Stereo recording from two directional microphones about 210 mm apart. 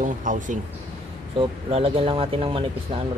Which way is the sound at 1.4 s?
25° right (ahead or behind).